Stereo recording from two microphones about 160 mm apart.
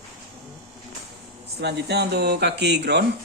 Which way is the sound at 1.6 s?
90° right.